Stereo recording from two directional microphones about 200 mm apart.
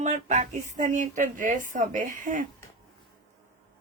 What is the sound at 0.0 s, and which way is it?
Speech, 35° right (ahead or behind).